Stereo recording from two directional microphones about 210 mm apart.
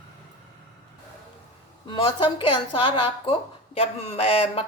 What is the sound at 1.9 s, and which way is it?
Speech, 25° left (ahead or behind).